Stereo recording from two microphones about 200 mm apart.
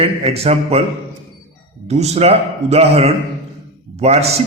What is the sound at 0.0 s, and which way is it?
Speech, 30° right (ahead or behind).